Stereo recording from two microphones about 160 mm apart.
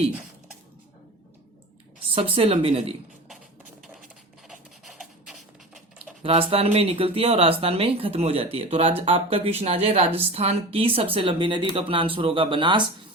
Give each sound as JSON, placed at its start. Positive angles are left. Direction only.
{"t": 2.1, "sound": "speech", "side_deg": -35}
{"t": 4.4, "sound": "a sound", "side_deg": 0}
{"t": 6.2, "sound": "speech", "side_deg": -35}